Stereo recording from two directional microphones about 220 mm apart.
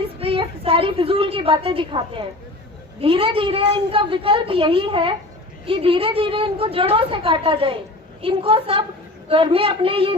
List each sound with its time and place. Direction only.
0.2 s a woman's voice: 25° right (ahead or behind)